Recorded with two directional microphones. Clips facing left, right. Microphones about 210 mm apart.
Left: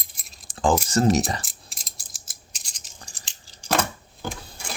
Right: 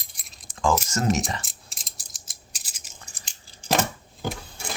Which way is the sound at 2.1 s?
5° right (ahead or behind).